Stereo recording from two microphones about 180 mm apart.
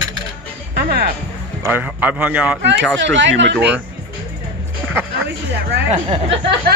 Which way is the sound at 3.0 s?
80° right.